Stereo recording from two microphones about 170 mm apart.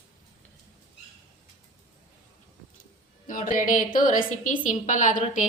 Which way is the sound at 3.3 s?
50° left (ahead or behind).